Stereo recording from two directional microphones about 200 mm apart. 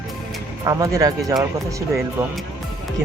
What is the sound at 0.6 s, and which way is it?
Speech, 15° right (ahead or behind).